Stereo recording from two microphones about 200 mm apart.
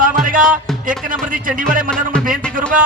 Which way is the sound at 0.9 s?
45° right (ahead or behind).